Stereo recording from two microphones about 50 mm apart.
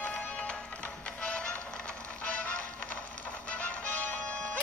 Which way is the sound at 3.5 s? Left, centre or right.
Left.